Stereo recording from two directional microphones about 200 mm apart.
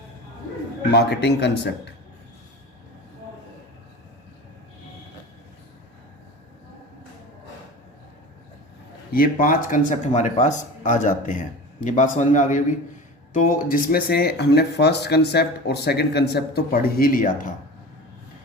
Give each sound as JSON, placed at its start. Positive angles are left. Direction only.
{"t": 0.9, "sound": "a man's voice", "side_deg": 55}
{"t": 9.1, "sound": "speech", "side_deg": 45}